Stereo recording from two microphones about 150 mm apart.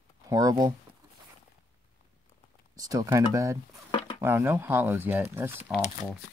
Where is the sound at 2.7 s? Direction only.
20° right (ahead or behind).